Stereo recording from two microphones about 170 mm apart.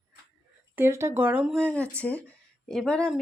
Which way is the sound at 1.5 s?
10° left (ahead or behind).